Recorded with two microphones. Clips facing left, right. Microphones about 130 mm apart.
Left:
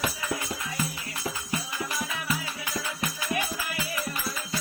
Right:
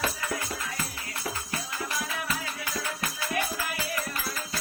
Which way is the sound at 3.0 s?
20° left (ahead or behind).